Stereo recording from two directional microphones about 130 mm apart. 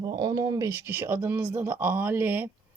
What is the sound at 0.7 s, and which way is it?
Speech, 15° right (ahead or behind).